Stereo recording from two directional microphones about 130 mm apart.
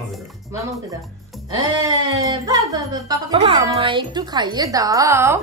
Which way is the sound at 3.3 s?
45° right (ahead or behind).